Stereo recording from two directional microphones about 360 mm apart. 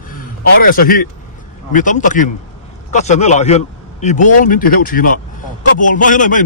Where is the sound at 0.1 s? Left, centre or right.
Left.